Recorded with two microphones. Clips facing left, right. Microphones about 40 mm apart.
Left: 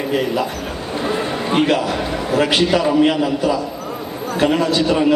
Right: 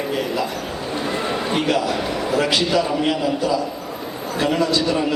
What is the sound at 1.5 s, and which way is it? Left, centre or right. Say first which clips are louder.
A man's voice: left 5 dB; left.